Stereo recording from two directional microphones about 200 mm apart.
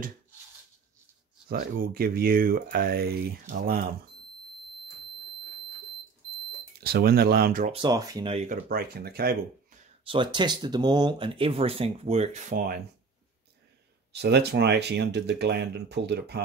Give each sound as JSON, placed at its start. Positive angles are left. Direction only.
{"t": 1.5, "sound": "speech", "side_deg": -45}
{"t": 6.8, "sound": "speech", "side_deg": -50}
{"t": 7.7, "sound": "speech", "side_deg": -20}
{"t": 8.5, "sound": "speech", "side_deg": -50}
{"t": 10.0, "sound": "speech", "side_deg": -25}
{"t": 14.1, "sound": "speech", "side_deg": -55}